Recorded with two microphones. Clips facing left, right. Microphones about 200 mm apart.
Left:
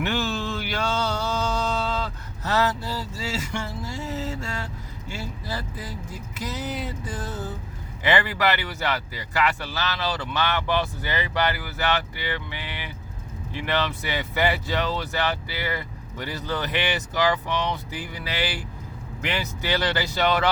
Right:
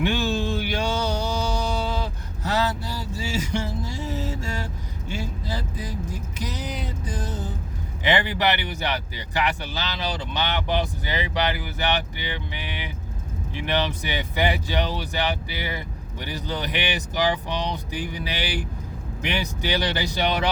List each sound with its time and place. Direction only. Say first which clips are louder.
0.0 s mantra: right 3 dB; 15° right (ahead or behind)
5.1 s vehicle: right 2 dB; 15° right (ahead or behind)
6.4 s music: left 2 dB; 15° right (ahead or behind)
8.0 s speech: even; 15° right (ahead or behind)